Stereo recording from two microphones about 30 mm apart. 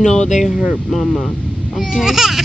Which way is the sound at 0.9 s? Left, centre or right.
Centre.